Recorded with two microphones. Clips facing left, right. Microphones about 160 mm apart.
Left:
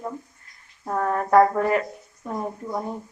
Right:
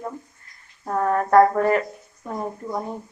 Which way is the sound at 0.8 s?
Centre (ahead or behind).